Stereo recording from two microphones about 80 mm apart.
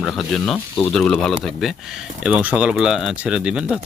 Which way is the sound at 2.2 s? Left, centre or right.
Centre.